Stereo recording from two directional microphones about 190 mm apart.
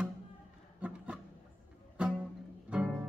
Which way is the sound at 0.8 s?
5° right (ahead or behind).